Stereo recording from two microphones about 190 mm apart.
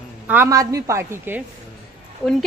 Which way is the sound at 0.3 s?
15° right (ahead or behind).